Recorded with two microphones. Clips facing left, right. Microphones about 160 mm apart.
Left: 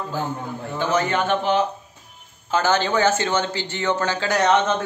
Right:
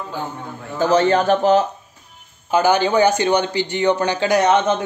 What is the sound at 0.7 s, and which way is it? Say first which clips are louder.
Speech: right 6 dB; 35° right (ahead or behind).